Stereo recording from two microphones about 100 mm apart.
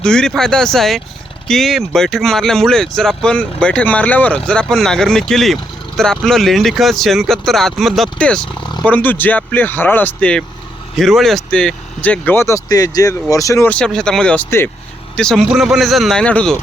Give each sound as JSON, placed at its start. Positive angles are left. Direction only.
{"t": 0.0, "sound": "speech", "side_deg": 5}
{"t": 10.9, "sound": "speech", "side_deg": 0}
{"t": 13.7, "sound": "speech", "side_deg": 10}
{"t": 15.4, "sound": "speech", "side_deg": -5}